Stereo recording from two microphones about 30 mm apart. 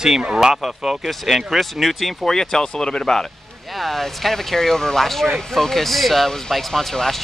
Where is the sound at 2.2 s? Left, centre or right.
Centre.